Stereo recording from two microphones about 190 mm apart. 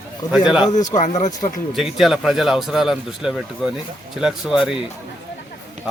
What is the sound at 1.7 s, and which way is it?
Speech, centre (ahead or behind).